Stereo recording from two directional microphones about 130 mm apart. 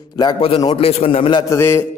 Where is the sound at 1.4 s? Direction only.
20° left (ahead or behind).